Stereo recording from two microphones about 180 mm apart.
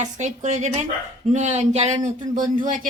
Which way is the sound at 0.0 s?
40° right (ahead or behind).